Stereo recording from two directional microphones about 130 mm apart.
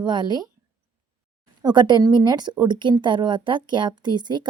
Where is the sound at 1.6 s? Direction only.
35° right (ahead or behind).